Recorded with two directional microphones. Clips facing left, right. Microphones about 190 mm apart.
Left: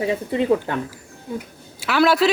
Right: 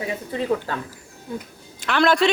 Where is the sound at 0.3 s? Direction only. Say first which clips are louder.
Left 3 dB; 20° left (ahead or behind).